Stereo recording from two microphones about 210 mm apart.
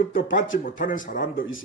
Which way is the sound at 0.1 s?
45° left (ahead or behind).